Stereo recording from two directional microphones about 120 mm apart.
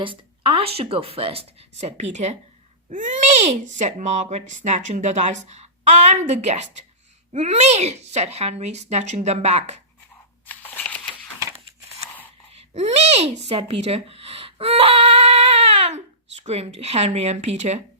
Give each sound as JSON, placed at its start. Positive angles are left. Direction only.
{"t": 0.0, "sound": "speech", "side_deg": -45}
{"t": 2.9, "sound": "a child's voice", "side_deg": -90}
{"t": 10.4, "sound": "scissors", "side_deg": 15}
{"t": 12.5, "sound": "speech", "side_deg": -65}